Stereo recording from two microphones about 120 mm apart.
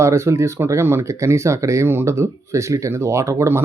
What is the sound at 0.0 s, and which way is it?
Speech, 25° right (ahead or behind).